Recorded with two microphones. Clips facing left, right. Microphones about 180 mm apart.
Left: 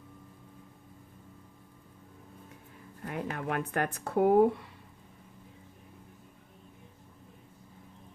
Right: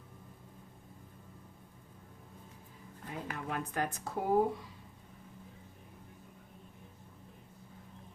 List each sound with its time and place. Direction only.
3.1 s speech: 60° left (ahead or behind)